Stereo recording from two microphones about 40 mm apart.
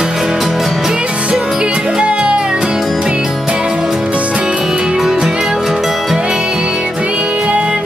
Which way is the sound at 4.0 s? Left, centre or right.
Right.